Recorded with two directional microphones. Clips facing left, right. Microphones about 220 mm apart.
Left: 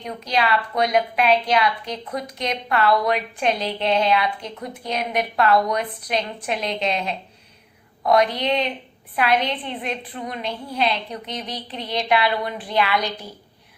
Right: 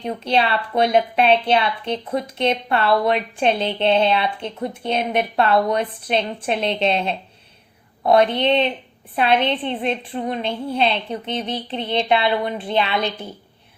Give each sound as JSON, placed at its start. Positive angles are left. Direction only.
{"t": 0.0, "sound": "a woman's voice", "side_deg": -30}